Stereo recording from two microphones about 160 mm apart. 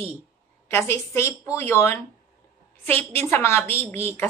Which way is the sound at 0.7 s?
15° left (ahead or behind).